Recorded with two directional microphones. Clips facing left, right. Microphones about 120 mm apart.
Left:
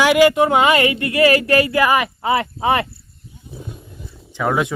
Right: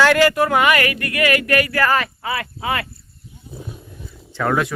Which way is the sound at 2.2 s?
25° left (ahead or behind).